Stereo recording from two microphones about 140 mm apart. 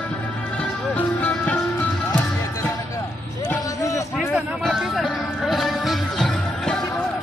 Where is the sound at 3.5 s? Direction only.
20° left (ahead or behind).